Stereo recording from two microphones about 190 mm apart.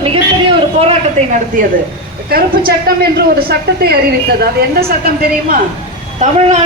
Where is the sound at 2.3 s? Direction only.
50° right (ahead or behind).